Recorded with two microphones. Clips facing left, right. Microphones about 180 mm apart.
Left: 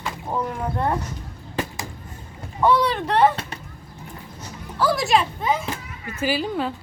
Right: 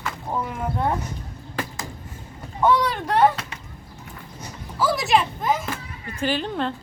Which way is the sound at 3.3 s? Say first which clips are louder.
Left 2 dB; 35° left (ahead or behind).